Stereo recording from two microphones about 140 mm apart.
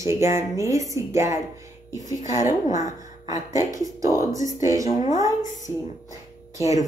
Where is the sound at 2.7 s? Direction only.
25° right (ahead or behind).